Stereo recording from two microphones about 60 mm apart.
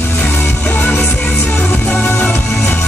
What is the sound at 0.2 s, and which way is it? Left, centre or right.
Music, left.